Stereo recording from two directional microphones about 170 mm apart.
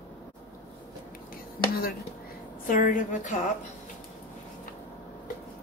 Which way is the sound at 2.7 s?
55° left (ahead or behind).